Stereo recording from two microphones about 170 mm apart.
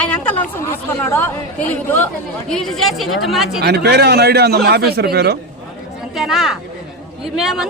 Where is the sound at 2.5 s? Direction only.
Centre (ahead or behind).